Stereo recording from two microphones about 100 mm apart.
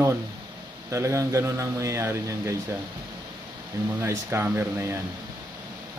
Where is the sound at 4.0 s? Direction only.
25° right (ahead or behind).